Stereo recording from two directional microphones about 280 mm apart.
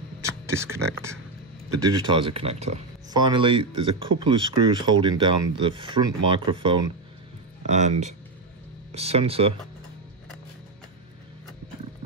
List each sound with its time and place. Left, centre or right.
0.2 s speech: centre